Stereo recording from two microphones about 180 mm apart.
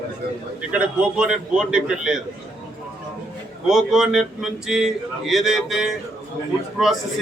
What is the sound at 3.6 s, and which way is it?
Speech, centre (ahead or behind).